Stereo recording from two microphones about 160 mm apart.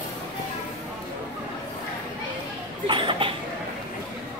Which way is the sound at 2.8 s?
30° right (ahead or behind).